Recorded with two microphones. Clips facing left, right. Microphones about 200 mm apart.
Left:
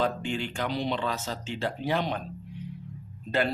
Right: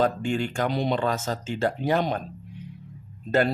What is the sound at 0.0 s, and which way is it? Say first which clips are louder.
Speech: right 5 dB; 45° right (ahead or behind).